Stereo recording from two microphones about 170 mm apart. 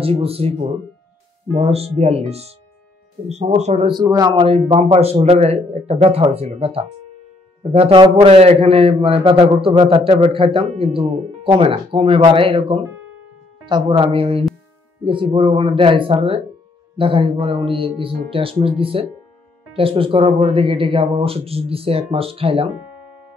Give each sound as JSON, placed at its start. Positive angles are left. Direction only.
{"t": 0.0, "sound": "a man's voice", "side_deg": -35}
{"t": 3.9, "sound": "speech", "side_deg": -25}
{"t": 4.6, "sound": "a man's voice", "side_deg": -35}